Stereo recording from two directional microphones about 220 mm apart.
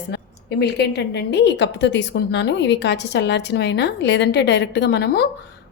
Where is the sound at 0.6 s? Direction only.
50° left (ahead or behind).